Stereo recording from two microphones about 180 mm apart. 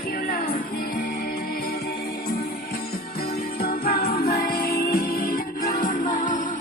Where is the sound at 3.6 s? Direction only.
55° left (ahead or behind).